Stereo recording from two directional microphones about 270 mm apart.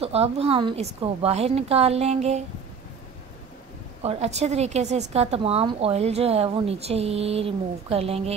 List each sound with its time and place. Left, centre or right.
0.0 s a woman's voice: right
4.0 s a woman's voice: right